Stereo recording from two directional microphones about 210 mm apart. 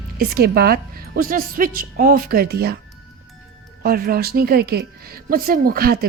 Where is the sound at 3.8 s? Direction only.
45° right (ahead or behind).